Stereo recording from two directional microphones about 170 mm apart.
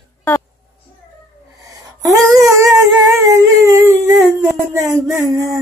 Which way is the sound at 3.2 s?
20° right (ahead or behind).